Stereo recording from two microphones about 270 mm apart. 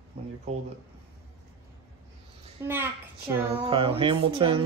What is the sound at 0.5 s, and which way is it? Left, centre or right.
Speech, right.